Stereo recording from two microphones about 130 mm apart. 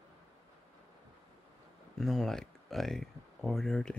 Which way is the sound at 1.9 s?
5° left (ahead or behind).